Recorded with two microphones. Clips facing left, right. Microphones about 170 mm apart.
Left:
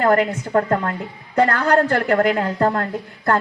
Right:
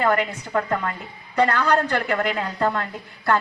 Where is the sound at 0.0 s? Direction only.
45° left (ahead or behind).